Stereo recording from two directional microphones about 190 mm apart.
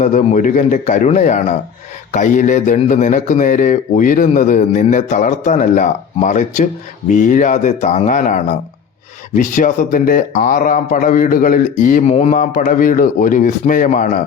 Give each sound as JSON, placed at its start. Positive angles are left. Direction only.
{"t": 0.0, "sound": "a man's voice", "side_deg": 40}